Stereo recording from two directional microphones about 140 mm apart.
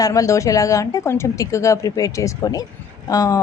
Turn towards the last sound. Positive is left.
turn(degrees=25)  # may be behind; listen again after turning